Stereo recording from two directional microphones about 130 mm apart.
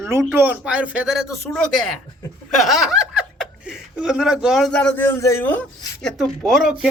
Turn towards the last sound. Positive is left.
turn(degrees=0)  # may be behind; listen again after turning